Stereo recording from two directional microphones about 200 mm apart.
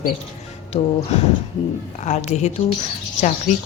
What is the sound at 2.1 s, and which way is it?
Speech, 35° left (ahead or behind).